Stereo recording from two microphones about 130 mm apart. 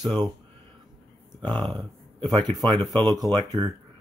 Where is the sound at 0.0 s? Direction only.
35° right (ahead or behind).